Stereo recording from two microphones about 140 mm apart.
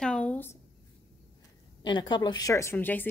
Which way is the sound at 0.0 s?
10° left (ahead or behind).